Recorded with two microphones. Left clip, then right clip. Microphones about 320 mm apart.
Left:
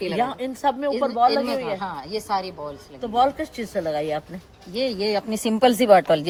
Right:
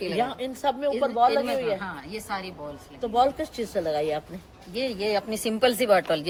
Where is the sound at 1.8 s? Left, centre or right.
Centre.